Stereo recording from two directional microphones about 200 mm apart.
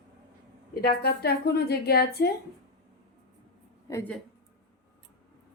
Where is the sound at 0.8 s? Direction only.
50° left (ahead or behind).